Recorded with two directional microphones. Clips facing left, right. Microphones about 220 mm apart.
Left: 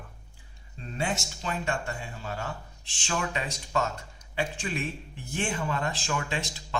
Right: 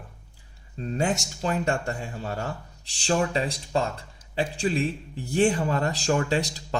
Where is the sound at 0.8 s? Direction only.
40° right (ahead or behind).